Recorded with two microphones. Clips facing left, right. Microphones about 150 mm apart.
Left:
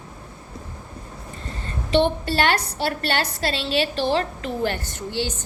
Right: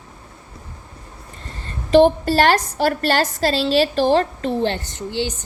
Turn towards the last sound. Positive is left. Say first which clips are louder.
# right 3 dB
turn(degrees=-15)  # may be behind; listen again after turning